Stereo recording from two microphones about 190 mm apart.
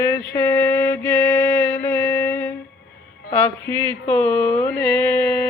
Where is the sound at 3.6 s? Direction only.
10° left (ahead or behind).